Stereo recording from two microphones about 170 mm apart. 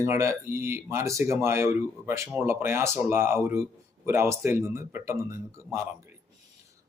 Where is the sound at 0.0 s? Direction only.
15° right (ahead or behind).